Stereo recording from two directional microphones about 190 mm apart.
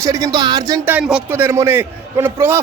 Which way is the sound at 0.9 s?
5° right (ahead or behind).